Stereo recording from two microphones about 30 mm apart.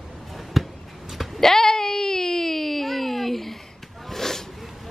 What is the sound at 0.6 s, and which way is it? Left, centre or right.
Basketball bounce, centre.